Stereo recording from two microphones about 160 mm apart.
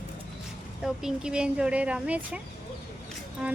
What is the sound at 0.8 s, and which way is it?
Speech, 5° right (ahead or behind).